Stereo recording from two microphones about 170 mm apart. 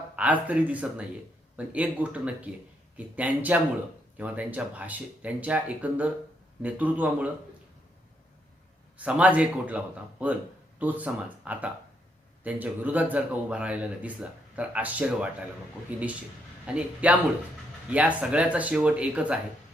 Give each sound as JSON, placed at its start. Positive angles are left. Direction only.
{"t": 0.2, "sound": "speech", "side_deg": -10}
{"t": 9.0, "sound": "speech", "side_deg": -10}